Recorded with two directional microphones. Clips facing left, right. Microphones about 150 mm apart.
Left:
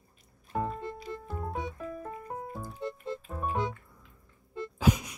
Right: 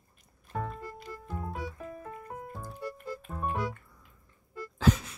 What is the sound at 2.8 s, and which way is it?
Music, 25° left (ahead or behind).